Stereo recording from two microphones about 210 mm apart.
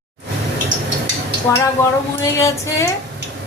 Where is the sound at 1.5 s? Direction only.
15° left (ahead or behind).